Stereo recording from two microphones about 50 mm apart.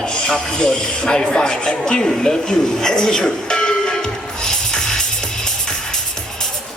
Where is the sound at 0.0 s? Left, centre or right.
Centre.